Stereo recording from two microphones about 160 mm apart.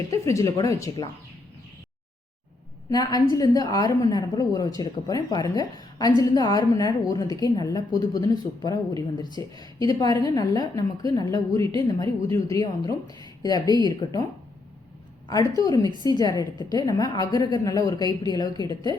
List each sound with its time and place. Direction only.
0.1 s speech: 20° left (ahead or behind)
2.9 s speech: 25° left (ahead or behind)
11.6 s speech: 35° right (ahead or behind)
11.9 s speech: 20° left (ahead or behind)
15.3 s speech: 20° left (ahead or behind)